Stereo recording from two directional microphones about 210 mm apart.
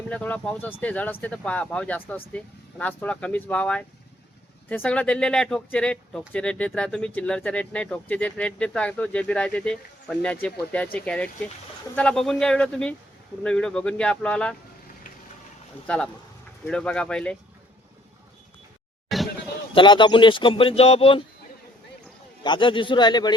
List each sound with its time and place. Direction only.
0.1 s speech: 5° left (ahead or behind)
15.9 s speech: 5° left (ahead or behind)
19.0 s a sound: centre (ahead or behind)
19.7 s speech: 20° left (ahead or behind)
22.4 s speech: 20° left (ahead or behind)